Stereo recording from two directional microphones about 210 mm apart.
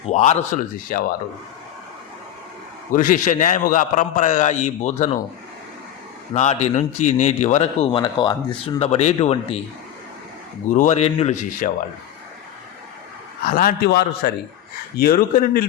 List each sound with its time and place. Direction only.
0.0 s a man's voice: 35° left (ahead or behind)
2.9 s a man's voice: 40° left (ahead or behind)
6.3 s a man's voice: 35° left (ahead or behind)
10.8 s a man's voice: 30° left (ahead or behind)
13.4 s speech: 45° left (ahead or behind)